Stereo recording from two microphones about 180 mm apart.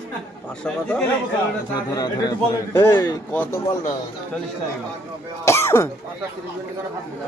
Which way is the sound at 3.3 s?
10° left (ahead or behind).